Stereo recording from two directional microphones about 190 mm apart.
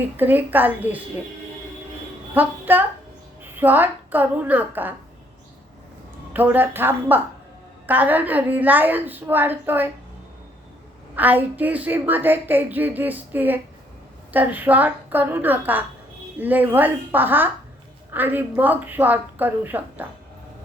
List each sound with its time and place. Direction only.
0.0 s a woman's voice: 10° right (ahead or behind)
2.3 s a woman's voice: 10° right (ahead or behind)
6.3 s a woman's voice: 10° right (ahead or behind)
11.1 s a woman's voice: 10° right (ahead or behind)